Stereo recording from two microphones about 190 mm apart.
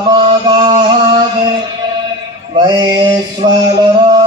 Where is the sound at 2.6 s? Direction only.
25° right (ahead or behind).